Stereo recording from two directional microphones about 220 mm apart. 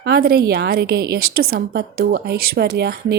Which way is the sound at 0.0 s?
45° right (ahead or behind).